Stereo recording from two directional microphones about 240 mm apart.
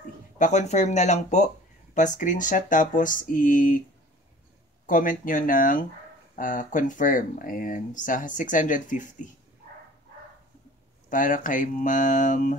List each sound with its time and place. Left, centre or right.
0.4 s speech: left
4.8 s speech: left
11.1 s speech: left